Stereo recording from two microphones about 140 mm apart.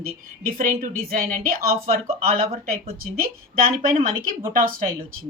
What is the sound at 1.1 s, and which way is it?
A woman's voice, 90° right.